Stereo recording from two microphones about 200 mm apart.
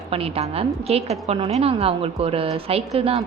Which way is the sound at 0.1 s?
30° right (ahead or behind).